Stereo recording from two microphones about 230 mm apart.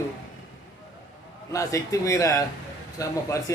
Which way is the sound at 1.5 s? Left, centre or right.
Centre.